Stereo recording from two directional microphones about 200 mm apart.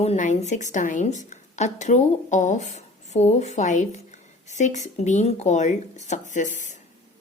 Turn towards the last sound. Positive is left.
turn(degrees=40)  # may be behind; listen again after turning